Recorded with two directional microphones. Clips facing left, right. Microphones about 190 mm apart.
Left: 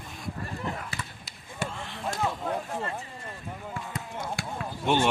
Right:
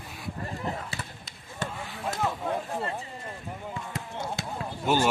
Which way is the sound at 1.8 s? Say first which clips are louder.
Right 1 dB; 5° right (ahead or behind).